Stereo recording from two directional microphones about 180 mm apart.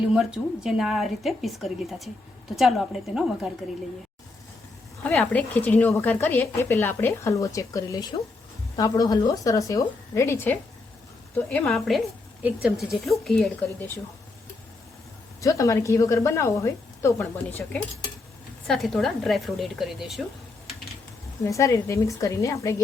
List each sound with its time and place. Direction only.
0.1 s a woman's voice: 5° right (ahead or behind)
5.0 s a woman's voice: 10° left (ahead or behind)
15.4 s a woman's voice: 20° left (ahead or behind); by 20.2 s centre (ahead or behind)
21.4 s speech: 15° left (ahead or behind)